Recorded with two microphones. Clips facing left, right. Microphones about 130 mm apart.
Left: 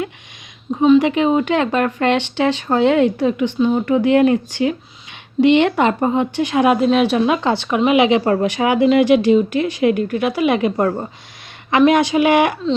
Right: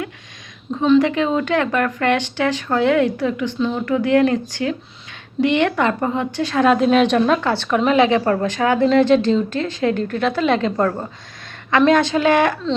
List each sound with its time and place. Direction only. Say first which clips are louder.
0.7 s speech: left 2 dB; 15° left (ahead or behind)
6.7 s a woman's voice: even; 5° left (ahead or behind)